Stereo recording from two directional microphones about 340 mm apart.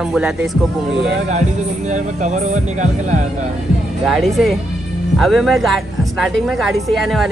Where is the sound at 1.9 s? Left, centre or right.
Right.